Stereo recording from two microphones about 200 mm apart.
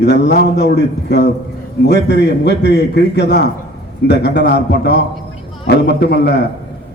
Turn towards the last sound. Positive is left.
turn(degrees=55)  # may be behind; listen again after turning